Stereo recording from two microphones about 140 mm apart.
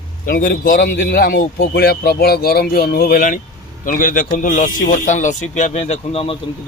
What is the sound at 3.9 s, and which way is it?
A man's voice, 75° left (ahead or behind).